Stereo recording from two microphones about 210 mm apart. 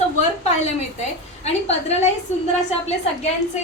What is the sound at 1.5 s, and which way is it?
Speech, 30° left (ahead or behind).